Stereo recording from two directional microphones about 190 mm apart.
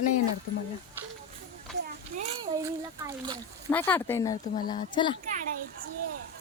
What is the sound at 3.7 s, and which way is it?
A child's voice, 10° left (ahead or behind).